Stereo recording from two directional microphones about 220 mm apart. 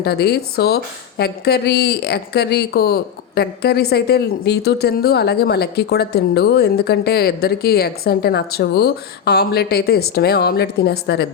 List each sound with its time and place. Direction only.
0.0 s speech: 45° left (ahead or behind)